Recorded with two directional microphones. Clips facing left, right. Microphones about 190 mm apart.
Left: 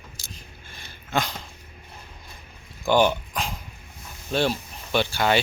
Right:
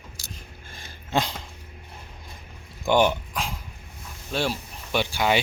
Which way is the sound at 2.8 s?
15° right (ahead or behind).